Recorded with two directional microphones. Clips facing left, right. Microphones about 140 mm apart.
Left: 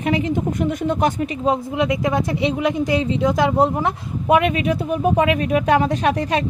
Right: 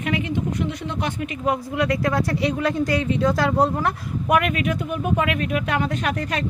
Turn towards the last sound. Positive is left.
turn(degrees=30)  # may be behind; listen again after turning